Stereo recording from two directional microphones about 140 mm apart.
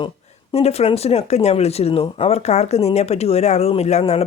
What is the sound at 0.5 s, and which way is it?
Speech, 50° left (ahead or behind).